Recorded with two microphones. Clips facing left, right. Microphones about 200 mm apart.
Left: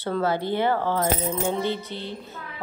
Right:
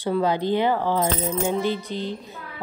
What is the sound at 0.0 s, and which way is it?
A woman's voice, 15° right (ahead or behind).